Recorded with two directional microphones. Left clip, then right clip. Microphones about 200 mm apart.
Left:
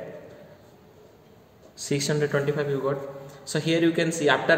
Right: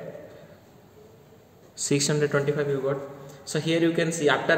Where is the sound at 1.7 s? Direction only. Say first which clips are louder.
Right 1 dB; 20° right (ahead or behind); by 4.5 s centre (ahead or behind).